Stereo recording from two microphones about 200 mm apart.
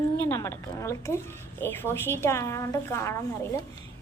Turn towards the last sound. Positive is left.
turn(degrees=15)  # may be behind; listen again after turning